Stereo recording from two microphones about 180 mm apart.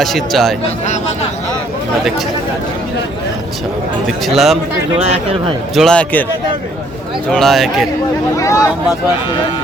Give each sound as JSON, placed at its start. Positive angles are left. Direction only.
{"t": 0.0, "sound": "speech", "side_deg": 0}
{"t": 4.0, "sound": "speech", "side_deg": 0}
{"t": 4.9, "sound": "speech", "side_deg": -35}
{"t": 5.7, "sound": "speech", "side_deg": 5}
{"t": 7.3, "sound": "speech", "side_deg": 0}
{"t": 8.4, "sound": "speech", "side_deg": 15}